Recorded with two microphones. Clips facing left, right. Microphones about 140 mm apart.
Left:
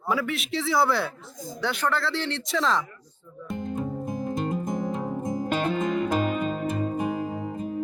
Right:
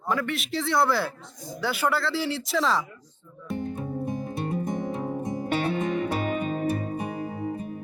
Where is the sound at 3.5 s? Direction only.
Centre (ahead or behind).